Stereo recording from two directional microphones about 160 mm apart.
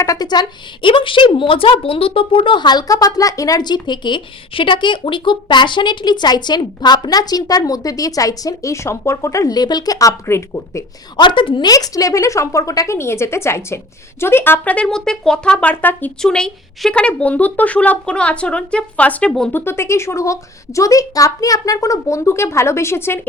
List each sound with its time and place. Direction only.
0.0 s a woman's voice: 25° left (ahead or behind)
11.2 s a woman's voice: 30° left (ahead or behind); by 23.2 s 15° left (ahead or behind)